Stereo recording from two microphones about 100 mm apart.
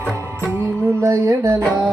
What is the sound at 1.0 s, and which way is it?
Music, 35° right (ahead or behind).